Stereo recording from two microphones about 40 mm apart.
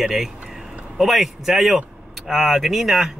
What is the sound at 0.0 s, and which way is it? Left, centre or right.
Speech, centre.